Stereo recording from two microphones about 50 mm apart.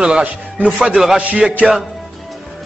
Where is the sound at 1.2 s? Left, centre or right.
Right.